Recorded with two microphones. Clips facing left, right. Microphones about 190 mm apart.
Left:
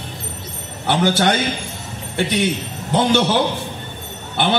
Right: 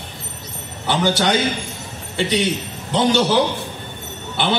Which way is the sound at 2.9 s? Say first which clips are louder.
Even; 55° left (ahead or behind).